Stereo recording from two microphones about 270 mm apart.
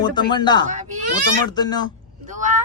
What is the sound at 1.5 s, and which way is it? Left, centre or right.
Speech, centre.